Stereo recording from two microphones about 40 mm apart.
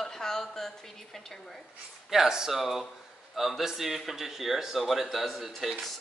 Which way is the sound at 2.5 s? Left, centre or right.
Centre.